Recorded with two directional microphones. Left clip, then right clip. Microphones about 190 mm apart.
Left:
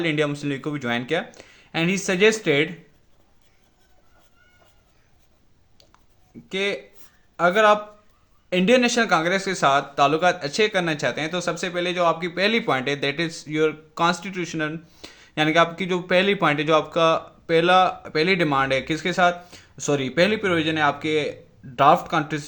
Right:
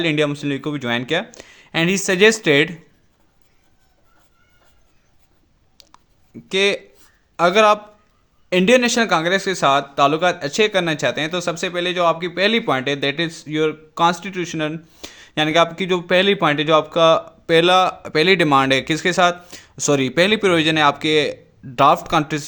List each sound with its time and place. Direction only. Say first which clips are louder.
0.0 s a man's voice: right 4 dB; 35° right (ahead or behind)
5.8 s a sound: right 7 dB; 50° right (ahead or behind)
6.5 s a man's voice: right 7 dB; 45° right (ahead or behind)